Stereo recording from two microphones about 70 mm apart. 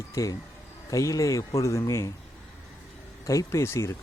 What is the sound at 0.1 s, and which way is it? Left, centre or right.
Speech, left.